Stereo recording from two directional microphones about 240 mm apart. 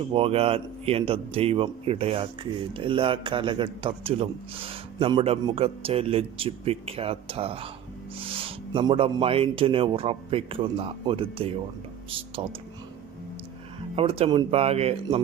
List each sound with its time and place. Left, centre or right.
0.1 s a man's voice: right
13.9 s a man's voice: right